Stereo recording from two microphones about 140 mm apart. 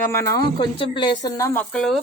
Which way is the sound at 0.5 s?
35° left (ahead or behind).